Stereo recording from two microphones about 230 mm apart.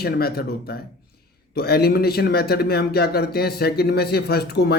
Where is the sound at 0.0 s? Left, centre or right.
Left.